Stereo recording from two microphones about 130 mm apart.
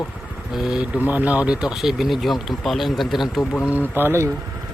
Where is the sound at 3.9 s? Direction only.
15° right (ahead or behind).